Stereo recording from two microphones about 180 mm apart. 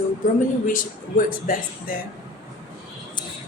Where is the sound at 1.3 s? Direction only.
50° left (ahead or behind).